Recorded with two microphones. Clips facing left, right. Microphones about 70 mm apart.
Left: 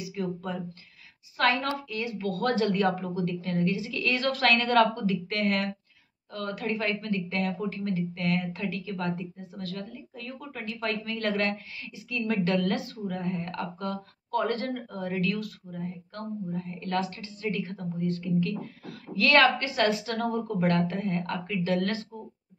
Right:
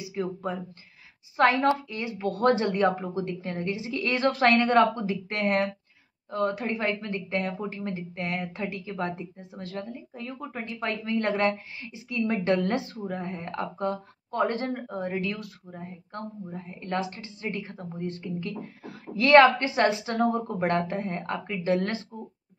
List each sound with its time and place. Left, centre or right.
0.0 s a woman's voice: right